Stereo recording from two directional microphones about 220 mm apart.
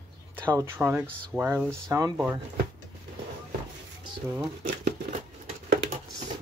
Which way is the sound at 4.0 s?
15° right (ahead or behind).